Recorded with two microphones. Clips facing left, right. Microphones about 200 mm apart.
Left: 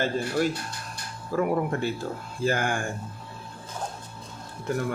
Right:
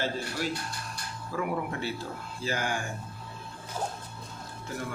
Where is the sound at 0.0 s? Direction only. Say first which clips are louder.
Left 7 dB; 50° left (ahead or behind).